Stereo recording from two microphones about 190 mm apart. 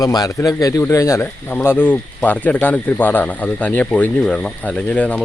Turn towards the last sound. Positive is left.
turn(degrees=5)  # may be behind; listen again after turning